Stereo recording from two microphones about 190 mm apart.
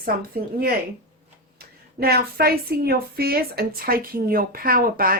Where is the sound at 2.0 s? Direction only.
55° right (ahead or behind).